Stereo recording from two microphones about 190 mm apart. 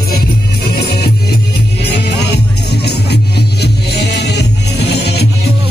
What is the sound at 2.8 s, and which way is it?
Music, 60° left (ahead or behind).